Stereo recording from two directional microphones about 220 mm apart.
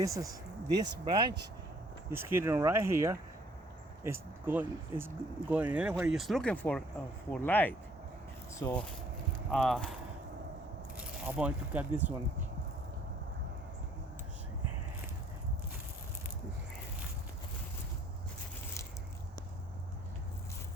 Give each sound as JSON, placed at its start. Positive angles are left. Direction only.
{"t": 0.0, "sound": "speech", "side_deg": -15}
{"t": 10.9, "sound": "speech", "side_deg": -5}